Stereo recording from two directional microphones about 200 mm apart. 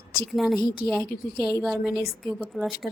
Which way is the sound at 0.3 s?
Centre (ahead or behind).